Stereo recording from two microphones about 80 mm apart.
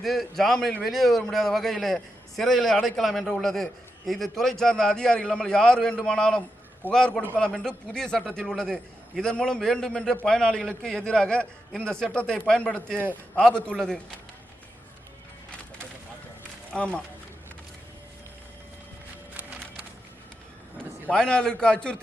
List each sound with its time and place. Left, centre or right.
0.0 s a man's voice: centre
16.7 s a man's voice: centre
19.3 s music: centre
21.1 s a man's voice: centre